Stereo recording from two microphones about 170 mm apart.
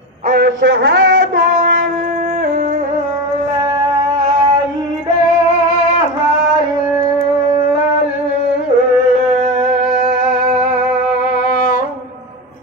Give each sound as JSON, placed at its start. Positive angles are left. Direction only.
{"t": 0.3, "sound": "a man's voice", "side_deg": -70}
{"t": 11.5, "sound": "music", "side_deg": 55}